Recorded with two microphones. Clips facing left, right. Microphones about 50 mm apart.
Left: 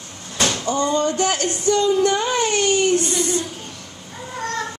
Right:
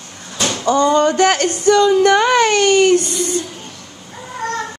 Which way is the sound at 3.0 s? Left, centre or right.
Left.